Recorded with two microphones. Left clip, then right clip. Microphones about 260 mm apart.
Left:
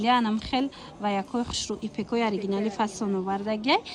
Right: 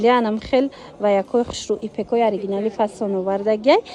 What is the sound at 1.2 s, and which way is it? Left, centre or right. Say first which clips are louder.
Speech: right 11 dB; right.